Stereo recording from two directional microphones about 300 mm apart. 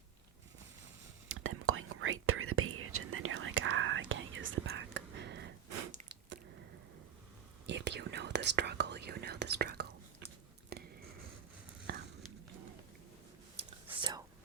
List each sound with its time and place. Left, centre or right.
1.3 s whispering: right
5.9 s biting: right
7.7 s whispering: right
10.7 s a sound: right
11.9 s a sound: right
13.6 s whispering: centre